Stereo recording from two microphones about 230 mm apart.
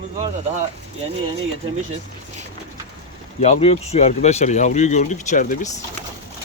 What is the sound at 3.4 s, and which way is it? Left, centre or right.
Speech, left.